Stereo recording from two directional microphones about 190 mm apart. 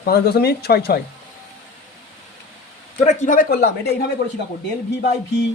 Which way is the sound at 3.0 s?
40° left (ahead or behind).